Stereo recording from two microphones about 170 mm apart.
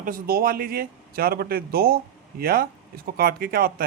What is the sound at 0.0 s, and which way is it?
Speech, 55° right (ahead or behind).